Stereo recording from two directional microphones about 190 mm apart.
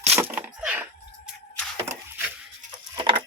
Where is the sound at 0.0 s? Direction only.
10° right (ahead or behind).